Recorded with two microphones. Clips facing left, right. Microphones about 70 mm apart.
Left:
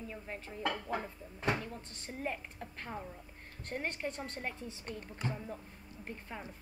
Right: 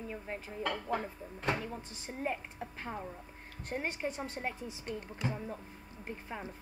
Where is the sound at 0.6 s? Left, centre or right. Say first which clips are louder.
Right 1 dB; centre.